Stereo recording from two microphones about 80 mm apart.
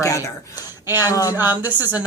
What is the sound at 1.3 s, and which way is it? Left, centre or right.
Speech, right.